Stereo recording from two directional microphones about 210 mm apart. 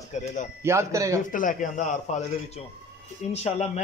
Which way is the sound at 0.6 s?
15° right (ahead or behind).